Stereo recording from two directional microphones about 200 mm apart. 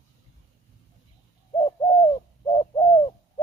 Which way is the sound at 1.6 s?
25° left (ahead or behind).